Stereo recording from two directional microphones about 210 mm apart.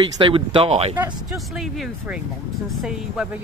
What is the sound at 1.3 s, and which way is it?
Speech, centre (ahead or behind).